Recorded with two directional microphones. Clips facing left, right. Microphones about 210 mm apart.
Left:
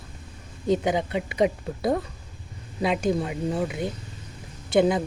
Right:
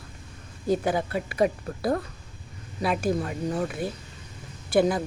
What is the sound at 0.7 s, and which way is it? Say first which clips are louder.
Speech: left 1 dB; 20° left (ahead or behind).